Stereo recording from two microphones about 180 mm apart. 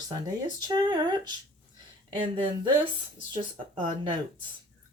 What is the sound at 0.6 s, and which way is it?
Speech, 25° right (ahead or behind).